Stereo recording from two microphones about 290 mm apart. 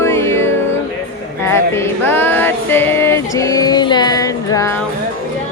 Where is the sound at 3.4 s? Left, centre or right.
Centre.